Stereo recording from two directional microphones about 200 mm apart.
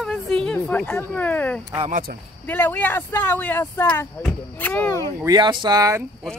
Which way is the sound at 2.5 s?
10° left (ahead or behind).